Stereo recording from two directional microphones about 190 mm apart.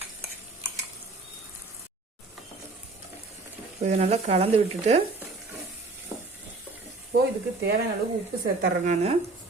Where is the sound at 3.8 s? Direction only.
35° right (ahead or behind).